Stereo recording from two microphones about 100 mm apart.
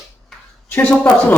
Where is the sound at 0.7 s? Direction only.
20° left (ahead or behind).